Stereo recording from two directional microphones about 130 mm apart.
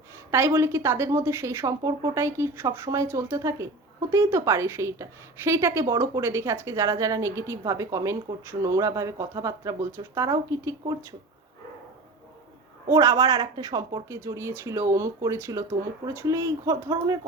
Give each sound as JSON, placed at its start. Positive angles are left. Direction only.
{"t": 0.3, "sound": "a woman's voice", "side_deg": -20}
{"t": 12.9, "sound": "a woman's voice", "side_deg": -25}